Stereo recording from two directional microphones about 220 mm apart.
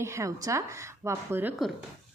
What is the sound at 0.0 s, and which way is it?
A woman's voice, 15° right (ahead or behind).